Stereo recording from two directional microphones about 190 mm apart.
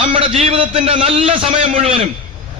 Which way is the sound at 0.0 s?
30° right (ahead or behind).